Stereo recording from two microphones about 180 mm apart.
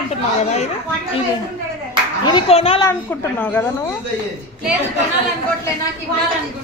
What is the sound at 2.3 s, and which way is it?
Speech, 30° left (ahead or behind).